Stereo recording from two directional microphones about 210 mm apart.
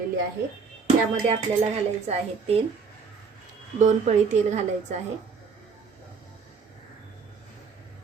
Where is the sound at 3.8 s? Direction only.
35° right (ahead or behind).